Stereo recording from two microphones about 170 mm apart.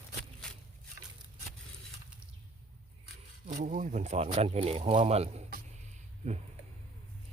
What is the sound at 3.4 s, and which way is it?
Speech, 50° right (ahead or behind).